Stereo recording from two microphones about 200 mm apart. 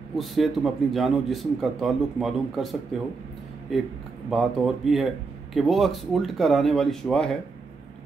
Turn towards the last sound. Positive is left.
turn(degrees=0)  # may be behind; listen again after turning